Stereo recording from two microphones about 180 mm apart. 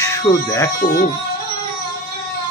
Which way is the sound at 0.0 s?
20° left (ahead or behind).